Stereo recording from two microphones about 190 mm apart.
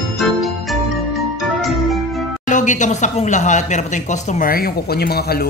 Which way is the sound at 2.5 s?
40° left (ahead or behind).